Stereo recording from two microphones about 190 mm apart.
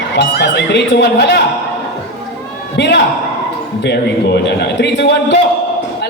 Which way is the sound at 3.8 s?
65° left (ahead or behind).